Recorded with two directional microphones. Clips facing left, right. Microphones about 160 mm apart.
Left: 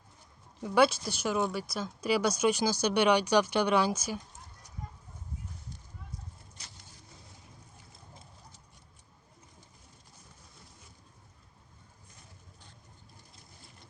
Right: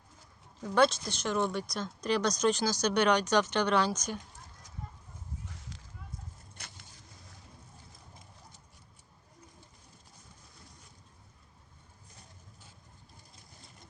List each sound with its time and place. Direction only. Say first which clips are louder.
0.6 s speech: left 1 dB; 10° left (ahead or behind)
5.5 s a sound: even; 90° right
6.6 s vehicle: right 4 dB; 55° right (ahead or behind)